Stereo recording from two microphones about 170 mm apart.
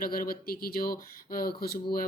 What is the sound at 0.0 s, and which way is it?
Speech, 55° left (ahead or behind).